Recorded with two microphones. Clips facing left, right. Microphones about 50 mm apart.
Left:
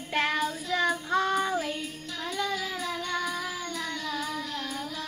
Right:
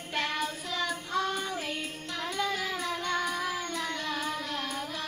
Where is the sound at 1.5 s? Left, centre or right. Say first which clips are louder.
Left 4 dB; right.